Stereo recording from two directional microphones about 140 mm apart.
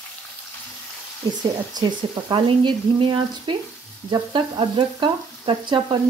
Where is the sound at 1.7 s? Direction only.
30° right (ahead or behind).